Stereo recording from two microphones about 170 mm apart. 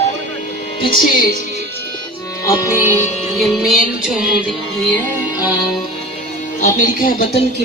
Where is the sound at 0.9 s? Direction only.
55° left (ahead or behind).